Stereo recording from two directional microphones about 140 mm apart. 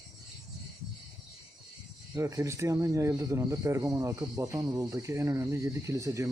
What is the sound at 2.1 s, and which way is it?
Speech, 25° right (ahead or behind).